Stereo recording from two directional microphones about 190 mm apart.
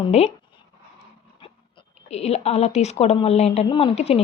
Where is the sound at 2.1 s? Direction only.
35° left (ahead or behind).